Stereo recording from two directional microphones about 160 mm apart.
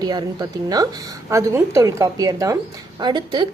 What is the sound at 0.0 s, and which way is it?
A woman's voice, 25° right (ahead or behind).